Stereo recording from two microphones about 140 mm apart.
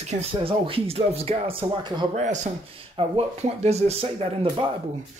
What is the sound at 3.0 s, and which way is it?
Speech, 45° right (ahead or behind).